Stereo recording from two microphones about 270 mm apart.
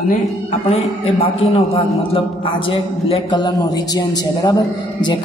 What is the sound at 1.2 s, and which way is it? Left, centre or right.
A man's voice, centre.